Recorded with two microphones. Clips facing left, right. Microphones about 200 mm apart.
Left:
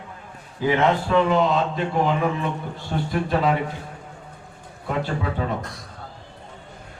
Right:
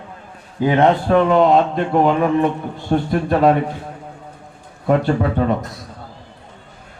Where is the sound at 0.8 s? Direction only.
55° right (ahead or behind).